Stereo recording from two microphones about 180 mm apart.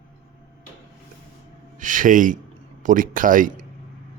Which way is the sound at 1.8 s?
45° right (ahead or behind).